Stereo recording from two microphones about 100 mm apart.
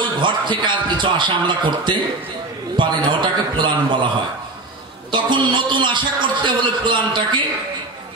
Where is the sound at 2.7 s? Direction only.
55° right (ahead or behind).